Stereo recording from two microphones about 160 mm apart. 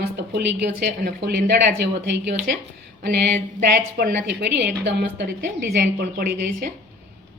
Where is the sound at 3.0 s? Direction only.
90° right.